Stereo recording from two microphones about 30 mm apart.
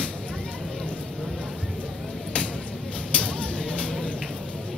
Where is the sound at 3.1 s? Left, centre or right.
Left.